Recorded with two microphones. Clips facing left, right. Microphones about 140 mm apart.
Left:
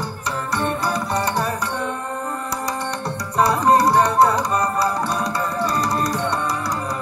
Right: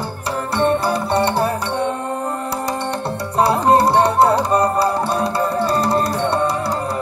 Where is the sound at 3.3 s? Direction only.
30° right (ahead or behind).